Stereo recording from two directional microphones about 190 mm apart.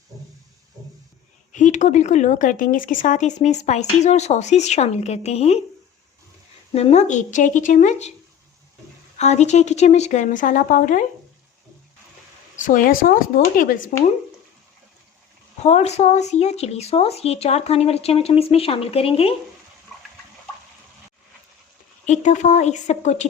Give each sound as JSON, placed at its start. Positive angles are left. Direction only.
{"t": 1.5, "sound": "speech", "side_deg": 40}
{"t": 6.7, "sound": "speech", "side_deg": 35}
{"t": 9.1, "sound": "speech", "side_deg": 35}
{"t": 12.6, "sound": "speech", "side_deg": 45}
{"t": 15.6, "sound": "speech", "side_deg": 35}
{"t": 22.0, "sound": "speech", "side_deg": 40}